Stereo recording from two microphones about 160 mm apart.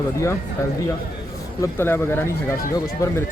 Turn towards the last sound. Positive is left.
turn(degrees=20)  # may be behind; listen again after turning